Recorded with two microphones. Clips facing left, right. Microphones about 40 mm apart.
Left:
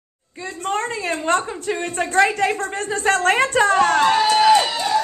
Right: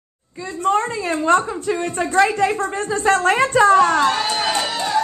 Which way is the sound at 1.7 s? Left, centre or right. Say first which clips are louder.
Right 2 dB; left.